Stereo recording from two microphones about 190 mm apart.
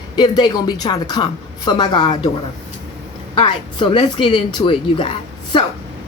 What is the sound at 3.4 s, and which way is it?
A woman's voice, 25° left (ahead or behind).